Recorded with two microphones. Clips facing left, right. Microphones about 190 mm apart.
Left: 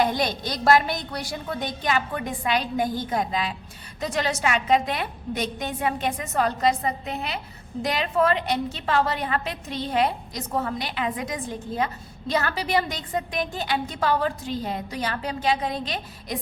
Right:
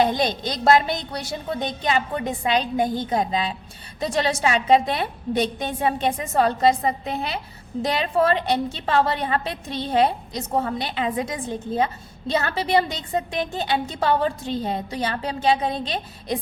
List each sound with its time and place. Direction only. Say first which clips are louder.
0.0 s a woman's voice: right 3 dB; 25° right (ahead or behind)